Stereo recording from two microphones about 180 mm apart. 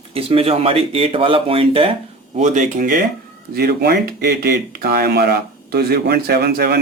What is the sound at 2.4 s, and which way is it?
Speech, 45° right (ahead or behind).